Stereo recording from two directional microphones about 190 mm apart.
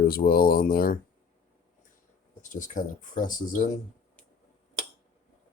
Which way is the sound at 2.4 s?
45° left (ahead or behind).